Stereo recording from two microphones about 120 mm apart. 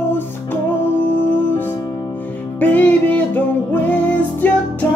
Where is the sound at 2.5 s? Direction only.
15° left (ahead or behind).